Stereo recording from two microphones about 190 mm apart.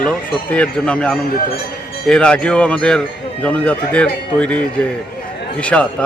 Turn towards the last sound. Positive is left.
turn(degrees=5)  # may be behind; listen again after turning